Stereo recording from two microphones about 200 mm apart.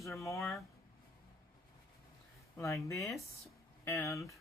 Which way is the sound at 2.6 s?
15° left (ahead or behind).